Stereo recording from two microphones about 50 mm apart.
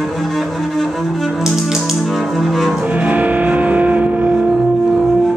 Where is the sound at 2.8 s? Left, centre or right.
Right.